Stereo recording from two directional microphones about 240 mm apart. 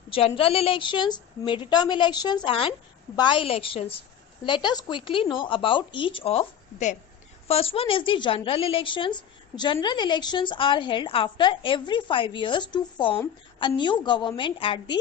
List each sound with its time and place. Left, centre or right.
0.1 s a woman's voice: left